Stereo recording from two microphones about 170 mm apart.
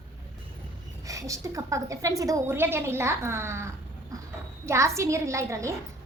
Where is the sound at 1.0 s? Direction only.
20° right (ahead or behind).